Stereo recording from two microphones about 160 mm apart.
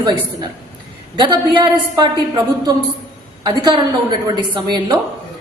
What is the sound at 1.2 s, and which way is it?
A woman's voice, 30° right (ahead or behind).